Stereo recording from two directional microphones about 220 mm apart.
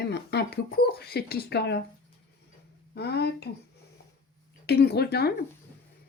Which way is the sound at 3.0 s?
50° left (ahead or behind).